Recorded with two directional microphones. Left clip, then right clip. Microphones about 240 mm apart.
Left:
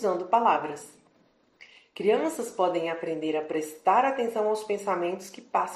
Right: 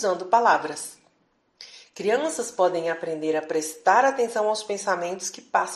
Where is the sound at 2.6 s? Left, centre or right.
Right.